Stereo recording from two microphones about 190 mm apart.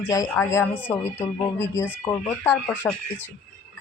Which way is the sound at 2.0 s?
15° left (ahead or behind).